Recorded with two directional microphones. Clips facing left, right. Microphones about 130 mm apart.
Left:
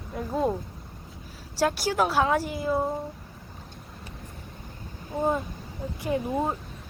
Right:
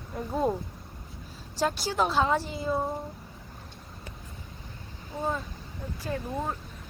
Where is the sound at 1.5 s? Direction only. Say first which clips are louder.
Left 3 dB; 10° left (ahead or behind).